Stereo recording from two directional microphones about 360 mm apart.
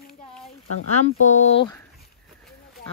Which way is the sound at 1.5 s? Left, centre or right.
Centre.